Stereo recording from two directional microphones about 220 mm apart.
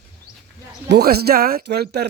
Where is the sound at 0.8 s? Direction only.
45° right (ahead or behind).